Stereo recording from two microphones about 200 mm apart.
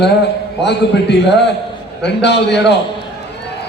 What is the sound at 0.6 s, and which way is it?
Speech, 60° left (ahead or behind).